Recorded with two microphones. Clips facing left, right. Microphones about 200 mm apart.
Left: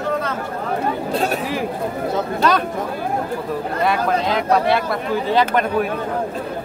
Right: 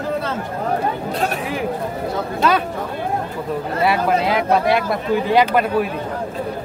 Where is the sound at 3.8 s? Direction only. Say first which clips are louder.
Right 2 dB; 10° right (ahead or behind).